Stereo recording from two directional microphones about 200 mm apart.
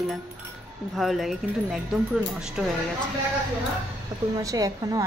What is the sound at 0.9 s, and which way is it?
Speech, centre (ahead or behind).